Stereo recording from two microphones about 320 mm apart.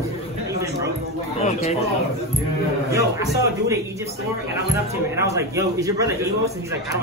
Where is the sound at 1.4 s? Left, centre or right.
Centre.